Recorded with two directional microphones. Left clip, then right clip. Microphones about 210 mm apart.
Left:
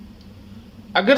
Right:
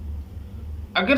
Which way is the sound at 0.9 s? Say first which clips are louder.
Left 4 dB; 30° left (ahead or behind).